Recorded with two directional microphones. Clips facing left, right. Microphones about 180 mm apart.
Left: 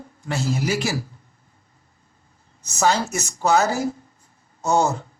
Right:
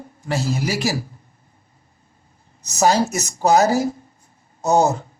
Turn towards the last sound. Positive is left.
turn(degrees=-35)  # may be behind; listen again after turning